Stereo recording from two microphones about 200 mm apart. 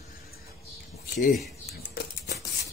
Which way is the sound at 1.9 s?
55° left (ahead or behind).